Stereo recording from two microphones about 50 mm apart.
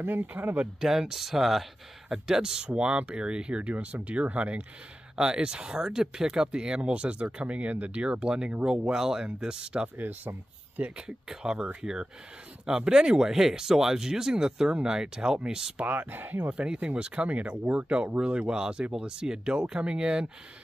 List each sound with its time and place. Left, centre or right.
0.0 s speech: right
0.7 s speech: centre
9.9 s speech: right
11.0 s speech: centre
15.8 s speech: right
16.4 s speech: right